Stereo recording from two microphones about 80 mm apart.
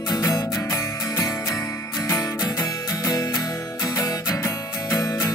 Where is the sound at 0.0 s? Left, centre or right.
Left.